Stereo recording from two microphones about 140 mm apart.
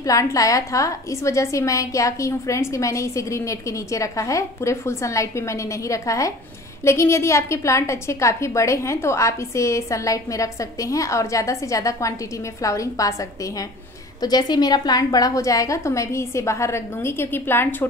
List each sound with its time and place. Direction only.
0.0 s a woman's voice: 25° left (ahead or behind)